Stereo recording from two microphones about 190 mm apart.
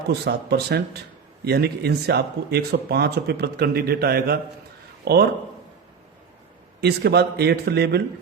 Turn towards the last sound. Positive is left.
turn(degrees=-60)  # may be behind; listen again after turning